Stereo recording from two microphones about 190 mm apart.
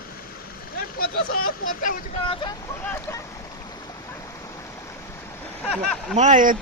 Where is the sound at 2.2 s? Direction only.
25° left (ahead or behind).